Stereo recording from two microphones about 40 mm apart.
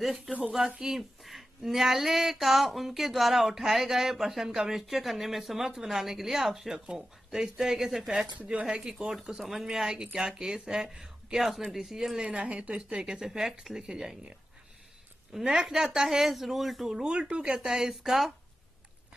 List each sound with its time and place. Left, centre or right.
0.0 s speech: centre
0.7 s speech: centre
0.9 s speech: centre
6.7 s a woman's voice: centre
8.5 s speech: right
8.8 s a woman's voice: centre
9.7 s a woman's voice: centre
12.2 s a woman's voice: right
15.3 s a woman's voice: centre
16.9 s a woman's voice: right